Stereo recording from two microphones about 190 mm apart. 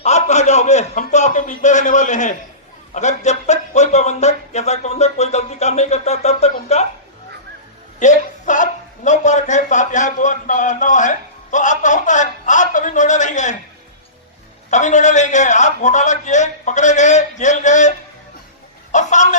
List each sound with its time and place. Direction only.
0.0 s a man's voice: 35° left (ahead or behind)
7.9 s a man's voice: 40° left (ahead or behind)
14.7 s a man's voice: 40° left (ahead or behind)